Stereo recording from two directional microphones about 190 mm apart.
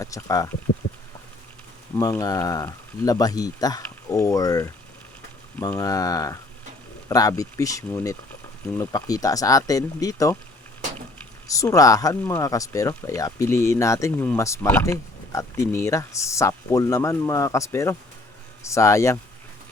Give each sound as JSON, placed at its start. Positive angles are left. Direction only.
{"t": 0.0, "sound": "speech", "side_deg": 15}
{"t": 2.0, "sound": "speech", "side_deg": 15}
{"t": 11.4, "sound": "speech", "side_deg": 15}